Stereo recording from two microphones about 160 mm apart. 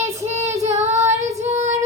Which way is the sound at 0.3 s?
45° right (ahead or behind).